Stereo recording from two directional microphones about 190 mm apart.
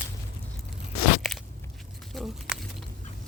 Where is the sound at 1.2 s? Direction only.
Centre (ahead or behind).